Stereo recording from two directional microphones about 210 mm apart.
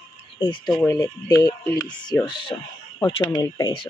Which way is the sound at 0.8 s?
15° left (ahead or behind).